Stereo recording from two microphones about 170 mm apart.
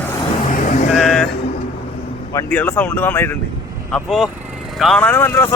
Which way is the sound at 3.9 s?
Centre (ahead or behind).